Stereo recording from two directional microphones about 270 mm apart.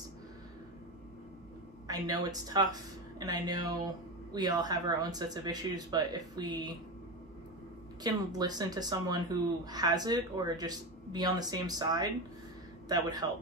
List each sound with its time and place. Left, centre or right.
1.9 s speech: centre
8.0 s speech: centre